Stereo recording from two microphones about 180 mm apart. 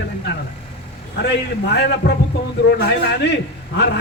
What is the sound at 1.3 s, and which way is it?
Speech, 70° left (ahead or behind).